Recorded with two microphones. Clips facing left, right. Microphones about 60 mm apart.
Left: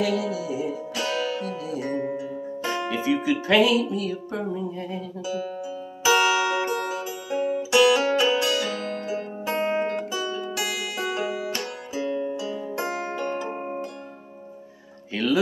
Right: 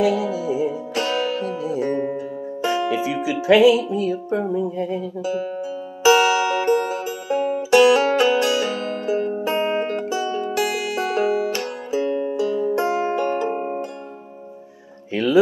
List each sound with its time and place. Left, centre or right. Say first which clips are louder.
0.0 s music: right 5 dB; right
2.6 s speech: right 6 dB; centre
6.0 s music: right 5 dB; right
12.9 s music: right 7 dB; right
15.1 s a sound: right 6 dB; right